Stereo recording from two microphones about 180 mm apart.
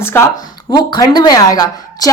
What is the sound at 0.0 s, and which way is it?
A woman's voice, 15° left (ahead or behind).